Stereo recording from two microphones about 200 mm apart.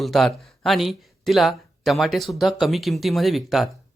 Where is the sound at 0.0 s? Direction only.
Centre (ahead or behind).